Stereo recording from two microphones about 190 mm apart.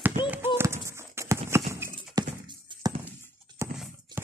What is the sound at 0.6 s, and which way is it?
Horse, 15° right (ahead or behind).